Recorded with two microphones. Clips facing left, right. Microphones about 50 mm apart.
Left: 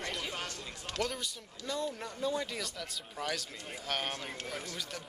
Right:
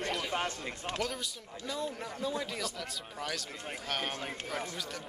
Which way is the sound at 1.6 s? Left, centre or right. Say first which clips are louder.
Left 1 dB; centre.